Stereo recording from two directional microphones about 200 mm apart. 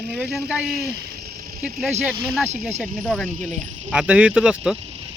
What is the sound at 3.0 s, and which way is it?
Speech, centre (ahead or behind).